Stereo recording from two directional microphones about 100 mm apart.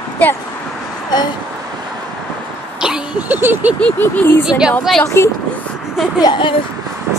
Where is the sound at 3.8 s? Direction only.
15° left (ahead or behind).